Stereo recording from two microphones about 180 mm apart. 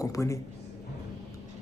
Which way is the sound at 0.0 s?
15° left (ahead or behind).